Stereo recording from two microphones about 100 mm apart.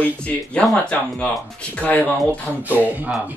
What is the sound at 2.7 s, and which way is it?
Speech, 15° right (ahead or behind).